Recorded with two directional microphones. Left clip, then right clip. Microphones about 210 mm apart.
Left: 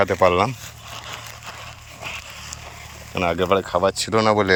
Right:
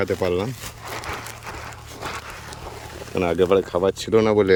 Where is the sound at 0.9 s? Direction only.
35° right (ahead or behind).